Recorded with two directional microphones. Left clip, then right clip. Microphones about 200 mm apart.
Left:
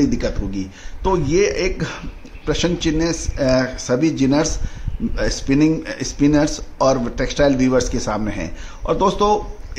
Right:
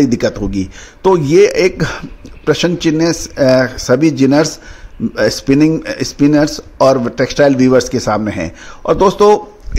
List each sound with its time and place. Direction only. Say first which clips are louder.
0.0 s speech: right 7 dB; 40° right (ahead or behind)